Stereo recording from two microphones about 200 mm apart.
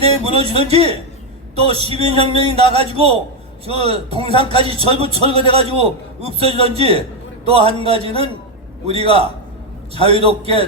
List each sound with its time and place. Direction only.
0.0 s a man's voice: 30° right (ahead or behind)
4.3 s speech: 25° left (ahead or behind)
4.5 s a man's voice: 30° right (ahead or behind)